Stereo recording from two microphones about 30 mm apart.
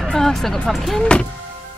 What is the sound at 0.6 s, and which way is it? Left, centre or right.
Speech, centre.